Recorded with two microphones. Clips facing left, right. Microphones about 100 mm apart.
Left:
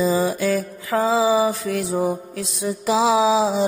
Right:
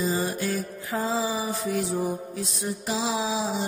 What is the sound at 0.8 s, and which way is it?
Mantra, 85° left.